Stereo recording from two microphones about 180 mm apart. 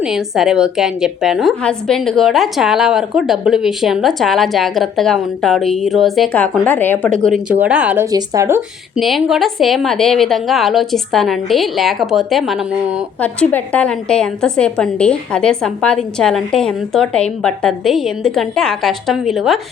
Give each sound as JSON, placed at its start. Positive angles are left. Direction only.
{"t": 0.0, "sound": "a woman's voice", "side_deg": 0}
{"t": 8.1, "sound": "speech", "side_deg": -20}
{"t": 9.0, "sound": "a woman's voice", "side_deg": 0}